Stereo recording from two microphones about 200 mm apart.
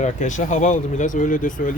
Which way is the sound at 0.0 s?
40° left (ahead or behind).